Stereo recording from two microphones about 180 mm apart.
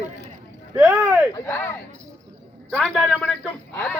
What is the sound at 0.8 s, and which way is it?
Speech, 5° right (ahead or behind).